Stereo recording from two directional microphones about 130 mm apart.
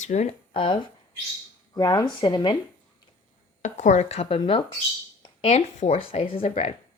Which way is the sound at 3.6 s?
65° left (ahead or behind).